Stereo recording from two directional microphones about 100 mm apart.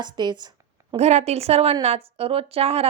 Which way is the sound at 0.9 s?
90° right.